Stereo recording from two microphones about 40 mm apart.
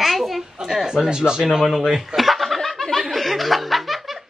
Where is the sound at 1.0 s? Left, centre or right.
Centre.